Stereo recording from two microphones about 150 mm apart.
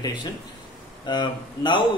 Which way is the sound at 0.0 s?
30° left (ahead or behind).